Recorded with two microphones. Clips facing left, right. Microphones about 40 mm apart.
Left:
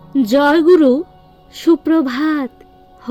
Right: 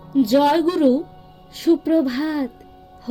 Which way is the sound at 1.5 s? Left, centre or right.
Left.